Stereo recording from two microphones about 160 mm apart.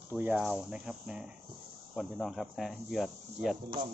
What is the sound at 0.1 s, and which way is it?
Speech, 10° right (ahead or behind).